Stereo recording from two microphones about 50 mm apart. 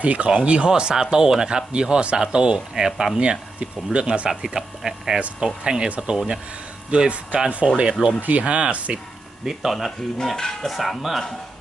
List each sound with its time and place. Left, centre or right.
0.0 s speech: right; by 3.1 s centre
3.2 s speech: right
4.3 s speech: centre
8.2 s speech: right
9.4 s speech: centre
10.2 s speech: centre